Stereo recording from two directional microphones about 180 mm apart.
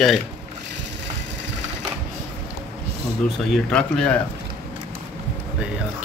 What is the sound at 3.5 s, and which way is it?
Speech, 5° left (ahead or behind).